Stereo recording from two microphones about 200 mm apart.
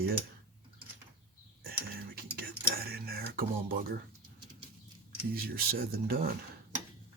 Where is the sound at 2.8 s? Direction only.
50° right (ahead or behind).